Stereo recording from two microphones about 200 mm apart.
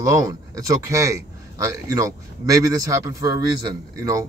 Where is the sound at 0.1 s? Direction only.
15° right (ahead or behind).